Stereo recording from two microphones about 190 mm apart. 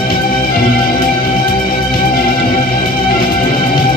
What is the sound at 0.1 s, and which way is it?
Music, 50° left (ahead or behind).